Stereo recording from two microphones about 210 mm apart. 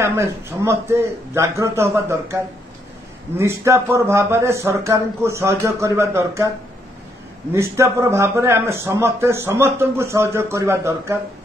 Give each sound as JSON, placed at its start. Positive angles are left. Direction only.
{"t": 0.0, "sound": "a man's voice", "side_deg": -10}
{"t": 7.5, "sound": "a man's voice", "side_deg": -15}